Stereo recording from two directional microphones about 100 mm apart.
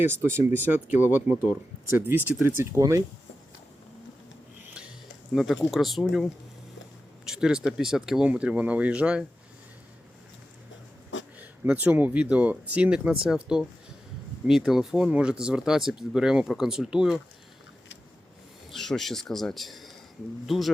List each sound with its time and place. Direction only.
0.0 s speech: 25° right (ahead or behind)
2.7 s speech: 30° right (ahead or behind)
5.3 s speech: centre (ahead or behind)
11.3 s speech: 15° right (ahead or behind)
18.7 s speech: 5° left (ahead or behind)